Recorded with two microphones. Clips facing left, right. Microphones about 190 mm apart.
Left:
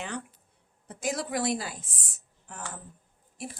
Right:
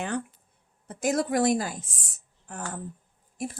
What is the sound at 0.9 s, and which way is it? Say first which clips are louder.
Speech: right 6 dB; 50° right (ahead or behind).